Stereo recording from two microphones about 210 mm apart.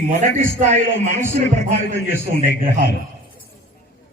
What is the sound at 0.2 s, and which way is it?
Speech, 35° right (ahead or behind).